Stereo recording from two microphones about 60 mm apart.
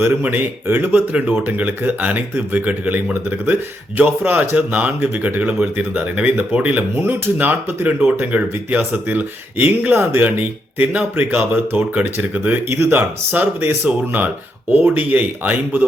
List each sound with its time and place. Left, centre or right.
0.0 s speech: right
6.9 s speech: right
12.6 s speech: right